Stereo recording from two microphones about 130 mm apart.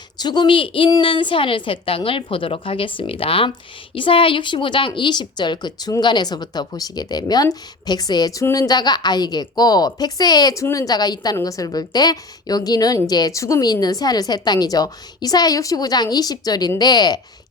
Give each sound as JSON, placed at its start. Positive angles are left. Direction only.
{"t": 0.2, "sound": "a woman's voice", "side_deg": 35}